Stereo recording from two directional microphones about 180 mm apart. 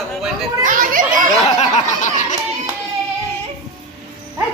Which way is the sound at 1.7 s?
45° left (ahead or behind).